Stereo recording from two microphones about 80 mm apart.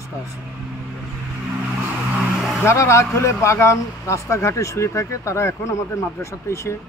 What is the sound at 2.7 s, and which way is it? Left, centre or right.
Speech, left.